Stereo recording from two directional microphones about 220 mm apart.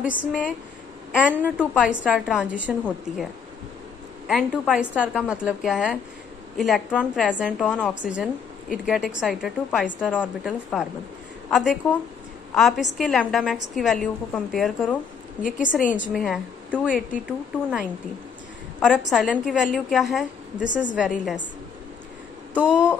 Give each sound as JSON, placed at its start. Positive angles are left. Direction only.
{"t": 0.0, "sound": "a woman's voice", "side_deg": -5}
{"t": 4.3, "sound": "a woman's voice", "side_deg": 0}
{"t": 12.5, "sound": "a woman's voice", "side_deg": 0}
{"t": 15.4, "sound": "a woman's voice", "side_deg": 35}
{"t": 15.7, "sound": "a woman's voice", "side_deg": -5}
{"t": 22.6, "sound": "a woman's voice", "side_deg": -5}